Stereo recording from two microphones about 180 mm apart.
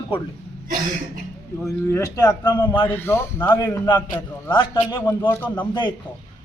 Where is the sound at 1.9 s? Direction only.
15° left (ahead or behind).